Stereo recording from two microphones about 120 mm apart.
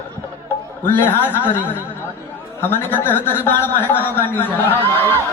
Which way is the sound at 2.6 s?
15° left (ahead or behind).